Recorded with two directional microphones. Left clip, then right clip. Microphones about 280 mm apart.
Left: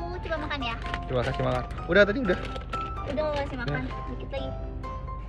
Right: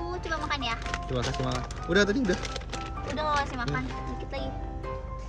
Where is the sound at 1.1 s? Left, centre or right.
Centre.